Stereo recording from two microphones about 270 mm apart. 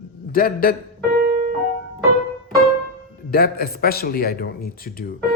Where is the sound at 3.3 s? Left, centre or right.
Left.